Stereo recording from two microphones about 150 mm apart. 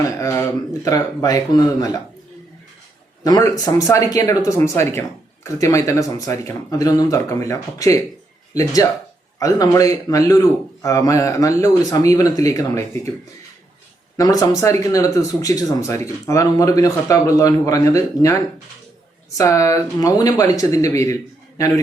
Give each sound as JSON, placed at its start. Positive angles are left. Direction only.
{"t": 0.2, "sound": "speech", "side_deg": 20}
{"t": 3.2, "sound": "speech", "side_deg": 25}
{"t": 14.2, "sound": "speech", "side_deg": 25}